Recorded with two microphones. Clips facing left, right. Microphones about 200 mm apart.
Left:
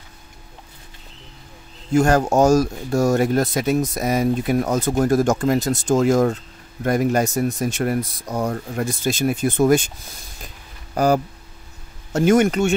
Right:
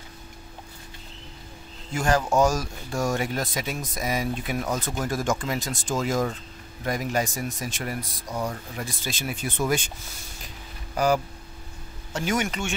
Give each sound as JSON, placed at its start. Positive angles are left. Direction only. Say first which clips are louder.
{"t": 2.0, "sound": "speech", "louder": "left 6 dB", "side_deg": 45}
{"t": 12.1, "sound": "speech", "louder": "left 11 dB", "side_deg": 45}